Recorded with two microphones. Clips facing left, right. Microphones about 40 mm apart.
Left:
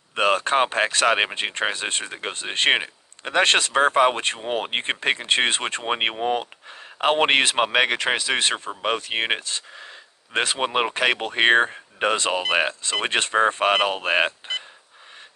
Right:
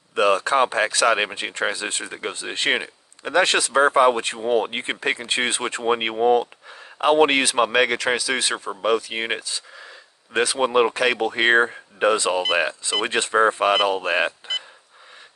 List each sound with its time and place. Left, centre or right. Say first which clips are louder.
0.1 s speech: right 2 dB; left
5.9 s speech: right 6 dB; left
10.6 s speech: right 5 dB; left